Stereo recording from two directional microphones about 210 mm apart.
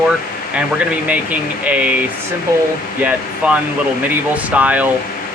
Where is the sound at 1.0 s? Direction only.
5° right (ahead or behind).